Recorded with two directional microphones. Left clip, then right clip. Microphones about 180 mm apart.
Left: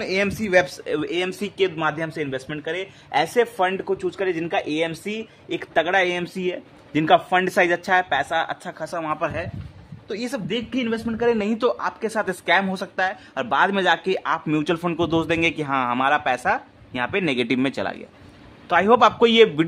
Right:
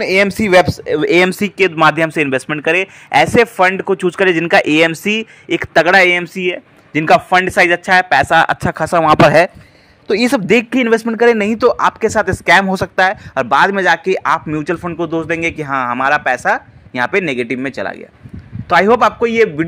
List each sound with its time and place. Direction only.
0.0 s a man's voice: 45° right (ahead or behind)
1.4 s speech: 35° right (ahead or behind)
3.8 s a man's voice: 40° right (ahead or behind)
11.1 s speech: 35° right (ahead or behind)
14.6 s speech: 10° right (ahead or behind); by 17.2 s 25° right (ahead or behind)
17.2 s speech: 10° right (ahead or behind)
18.7 s speech: 25° right (ahead or behind)
19.1 s a man's voice: centre (ahead or behind)